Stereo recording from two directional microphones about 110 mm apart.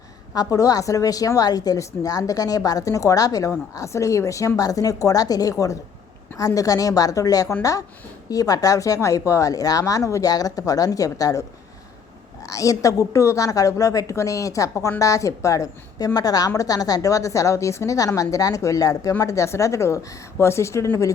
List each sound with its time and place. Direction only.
0.3 s a woman's voice: 35° left (ahead or behind)